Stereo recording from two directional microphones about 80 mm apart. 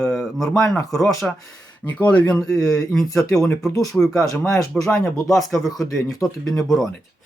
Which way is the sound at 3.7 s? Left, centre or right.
Left.